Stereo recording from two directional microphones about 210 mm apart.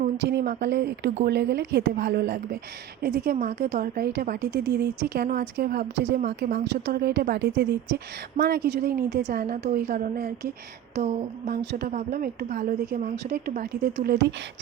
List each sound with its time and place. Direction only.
0.2 s a woman's voice: 50° right (ahead or behind)
10.9 s a woman's voice: 35° right (ahead or behind)
11.6 s speech: 55° right (ahead or behind)
11.9 s a woman's voice: 40° right (ahead or behind)